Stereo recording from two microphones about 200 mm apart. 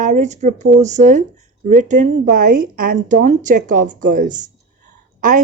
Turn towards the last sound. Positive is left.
turn(degrees=-40)  # may be behind; listen again after turning